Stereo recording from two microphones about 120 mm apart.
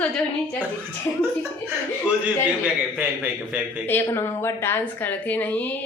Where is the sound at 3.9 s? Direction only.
20° left (ahead or behind).